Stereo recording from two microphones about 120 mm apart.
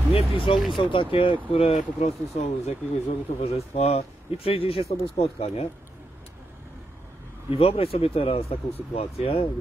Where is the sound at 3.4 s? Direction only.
60° left (ahead or behind).